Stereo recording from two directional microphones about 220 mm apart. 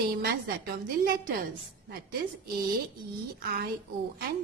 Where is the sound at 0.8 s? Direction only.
40° right (ahead or behind).